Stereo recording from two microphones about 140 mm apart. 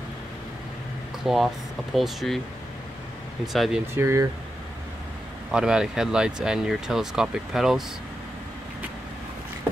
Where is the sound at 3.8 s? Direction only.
20° right (ahead or behind).